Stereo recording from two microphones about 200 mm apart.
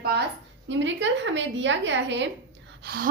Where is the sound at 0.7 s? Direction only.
65° right (ahead or behind).